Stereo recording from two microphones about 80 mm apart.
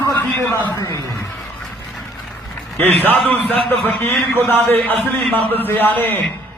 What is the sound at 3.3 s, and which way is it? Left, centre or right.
A man's voice, left.